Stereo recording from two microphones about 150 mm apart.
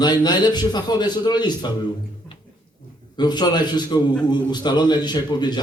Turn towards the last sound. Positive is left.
turn(degrees=30)  # may be behind; listen again after turning